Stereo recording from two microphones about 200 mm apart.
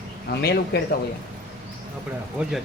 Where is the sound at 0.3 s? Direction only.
55° left (ahead or behind).